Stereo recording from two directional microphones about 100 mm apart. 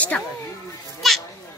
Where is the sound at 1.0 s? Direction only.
Centre (ahead or behind).